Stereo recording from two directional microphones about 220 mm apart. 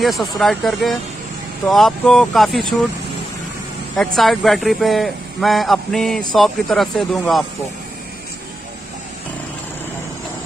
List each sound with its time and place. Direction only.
0.0 s speech: centre (ahead or behind)
3.9 s speech: centre (ahead or behind)